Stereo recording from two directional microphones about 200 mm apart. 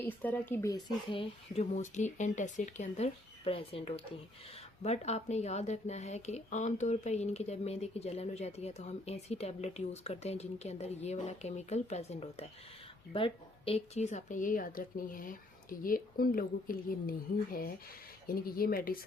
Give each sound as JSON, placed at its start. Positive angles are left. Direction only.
{"t": 0.0, "sound": "speech", "side_deg": 10}
{"t": 1.5, "sound": "a woman's voice", "side_deg": 35}